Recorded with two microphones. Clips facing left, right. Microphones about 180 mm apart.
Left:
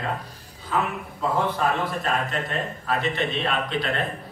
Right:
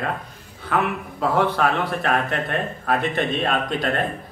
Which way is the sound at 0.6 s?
70° right (ahead or behind).